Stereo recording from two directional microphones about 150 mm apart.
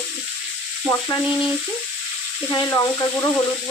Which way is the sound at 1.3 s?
5° right (ahead or behind).